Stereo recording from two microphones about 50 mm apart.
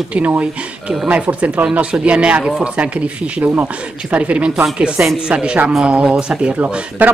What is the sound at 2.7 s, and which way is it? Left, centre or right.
A man's voice, right.